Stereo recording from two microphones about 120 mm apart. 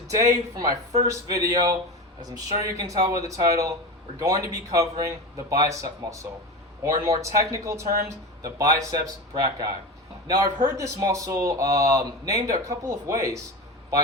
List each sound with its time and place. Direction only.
0.1 s speech: 25° right (ahead or behind)